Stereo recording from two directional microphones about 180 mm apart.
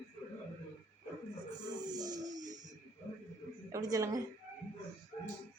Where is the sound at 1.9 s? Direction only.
20° right (ahead or behind).